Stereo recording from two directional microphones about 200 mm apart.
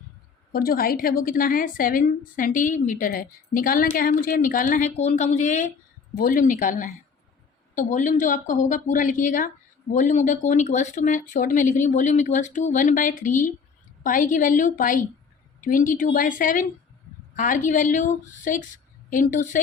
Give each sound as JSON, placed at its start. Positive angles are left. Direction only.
{"t": 0.5, "sound": "a woman's voice", "side_deg": 45}